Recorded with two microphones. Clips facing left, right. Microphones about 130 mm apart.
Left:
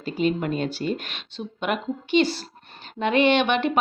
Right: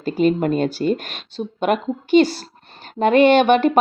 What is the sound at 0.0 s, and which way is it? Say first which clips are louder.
Speech: right 6 dB; 45° right (ahead or behind).